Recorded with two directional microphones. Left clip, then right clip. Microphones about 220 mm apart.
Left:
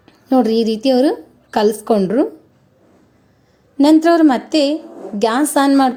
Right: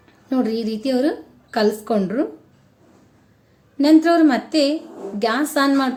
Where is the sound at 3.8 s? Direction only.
30° left (ahead or behind).